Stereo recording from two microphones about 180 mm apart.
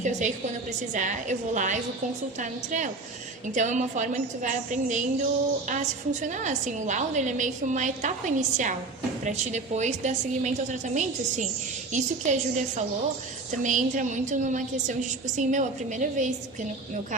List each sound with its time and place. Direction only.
0.0 s a woman's voice: 40° right (ahead or behind)